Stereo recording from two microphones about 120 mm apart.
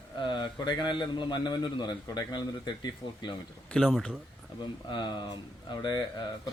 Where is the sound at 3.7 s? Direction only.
Centre (ahead or behind).